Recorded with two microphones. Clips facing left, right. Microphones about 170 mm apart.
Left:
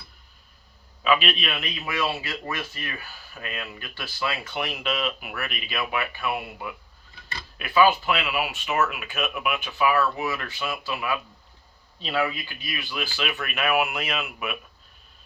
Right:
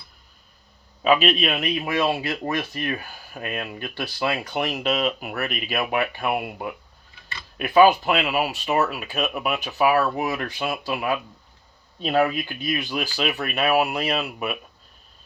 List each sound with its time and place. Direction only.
1.0 s speech: 40° right (ahead or behind)